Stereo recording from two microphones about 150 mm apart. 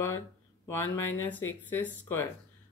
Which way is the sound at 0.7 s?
15° left (ahead or behind).